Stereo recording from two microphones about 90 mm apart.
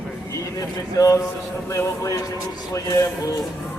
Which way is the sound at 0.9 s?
40° left (ahead or behind).